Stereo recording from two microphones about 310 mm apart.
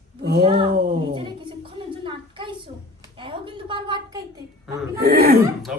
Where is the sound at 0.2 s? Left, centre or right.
Right.